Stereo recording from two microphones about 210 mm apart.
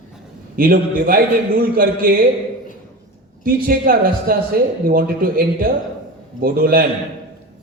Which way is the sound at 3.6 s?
45° right (ahead or behind).